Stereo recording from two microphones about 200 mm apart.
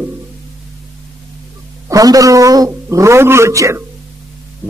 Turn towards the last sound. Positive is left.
turn(degrees=-15)  # may be behind; listen again after turning